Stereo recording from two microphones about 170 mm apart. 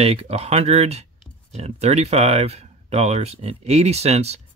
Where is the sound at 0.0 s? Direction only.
35° right (ahead or behind).